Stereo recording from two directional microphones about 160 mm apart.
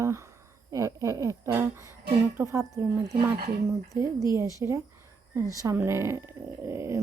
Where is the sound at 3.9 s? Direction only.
20° right (ahead or behind).